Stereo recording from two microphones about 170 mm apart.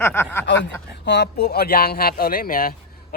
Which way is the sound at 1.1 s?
70° left (ahead or behind).